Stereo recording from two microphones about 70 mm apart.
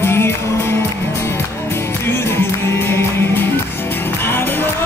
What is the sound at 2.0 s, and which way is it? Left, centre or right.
Music, left.